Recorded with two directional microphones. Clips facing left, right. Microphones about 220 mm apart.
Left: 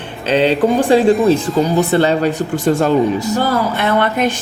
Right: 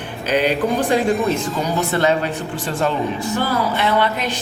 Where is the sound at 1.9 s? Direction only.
30° left (ahead or behind).